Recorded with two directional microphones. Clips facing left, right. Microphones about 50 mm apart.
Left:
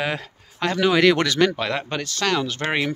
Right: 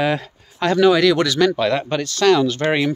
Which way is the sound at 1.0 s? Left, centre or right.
Left.